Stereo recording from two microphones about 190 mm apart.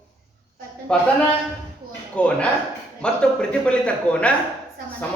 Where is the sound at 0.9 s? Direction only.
5° left (ahead or behind).